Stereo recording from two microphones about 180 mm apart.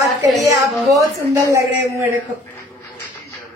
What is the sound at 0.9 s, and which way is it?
A woman's voice, 20° right (ahead or behind).